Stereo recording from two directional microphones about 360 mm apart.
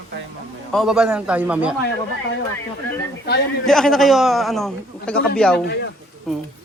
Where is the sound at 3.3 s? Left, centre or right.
Left.